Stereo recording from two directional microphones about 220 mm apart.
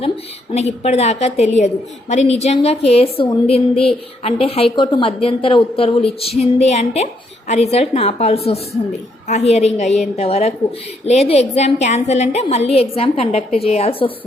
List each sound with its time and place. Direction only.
0.5 s a woman's voice: 30° left (ahead or behind)